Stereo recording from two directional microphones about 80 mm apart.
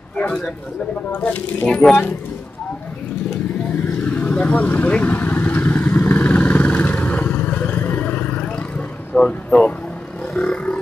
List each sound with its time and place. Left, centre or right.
0.1 s speech: centre
1.1 s speech: left
4.0 s vehicle: centre
10.3 s roar: centre